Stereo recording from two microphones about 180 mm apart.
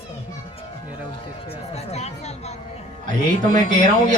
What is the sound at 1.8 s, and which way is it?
Chatter, 35° left (ahead or behind).